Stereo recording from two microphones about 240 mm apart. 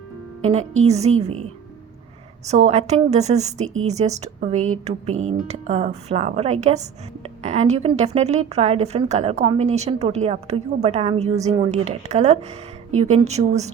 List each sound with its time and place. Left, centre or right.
0.8 s a woman's voice: right
2.5 s a woman's voice: right